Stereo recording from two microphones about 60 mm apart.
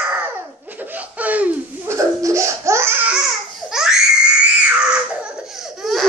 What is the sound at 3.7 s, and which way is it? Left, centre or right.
Baby cry, centre.